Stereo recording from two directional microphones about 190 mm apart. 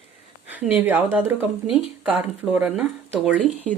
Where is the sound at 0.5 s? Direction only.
10° right (ahead or behind).